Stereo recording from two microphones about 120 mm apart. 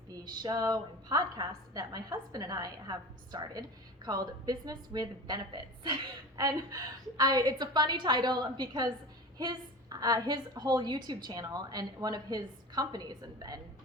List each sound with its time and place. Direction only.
0.1 s a woman's voice: 35° right (ahead or behind)